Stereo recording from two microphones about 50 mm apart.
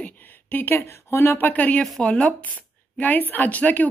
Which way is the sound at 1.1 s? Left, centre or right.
Left.